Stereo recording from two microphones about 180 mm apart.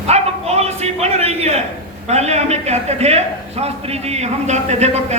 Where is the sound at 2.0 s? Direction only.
35° right (ahead or behind).